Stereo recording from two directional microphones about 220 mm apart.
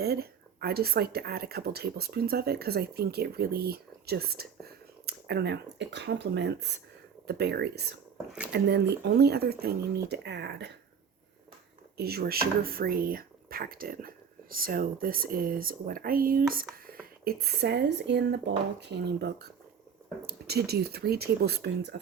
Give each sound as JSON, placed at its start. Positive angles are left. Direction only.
{"t": 0.0, "sound": "speech", "side_deg": -45}
{"t": 11.9, "sound": "speech", "side_deg": -45}